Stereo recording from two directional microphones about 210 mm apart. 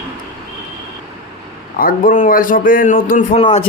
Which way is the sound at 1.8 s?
40° left (ahead or behind).